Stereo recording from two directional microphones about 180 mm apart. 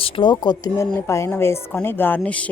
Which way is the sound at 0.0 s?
30° left (ahead or behind).